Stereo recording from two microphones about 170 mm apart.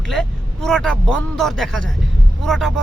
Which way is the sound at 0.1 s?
Centre (ahead or behind).